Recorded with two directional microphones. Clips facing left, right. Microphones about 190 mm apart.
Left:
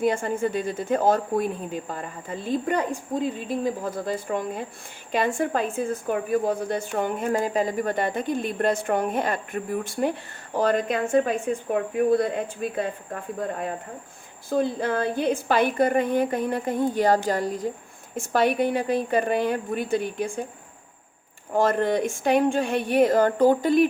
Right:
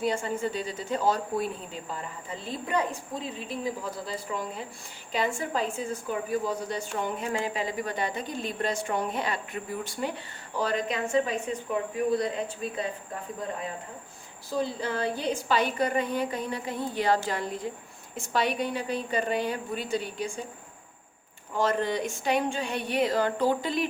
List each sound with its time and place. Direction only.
0.0 s a woman's voice: 50° left (ahead or behind)
14.5 s a woman's voice: 55° left (ahead or behind)
21.5 s a woman's voice: 50° left (ahead or behind)